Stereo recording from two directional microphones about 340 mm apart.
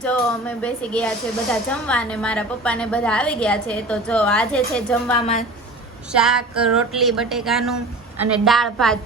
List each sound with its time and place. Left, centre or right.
0.0 s speech: centre
5.2 s a woman's voice: centre
6.1 s speech: centre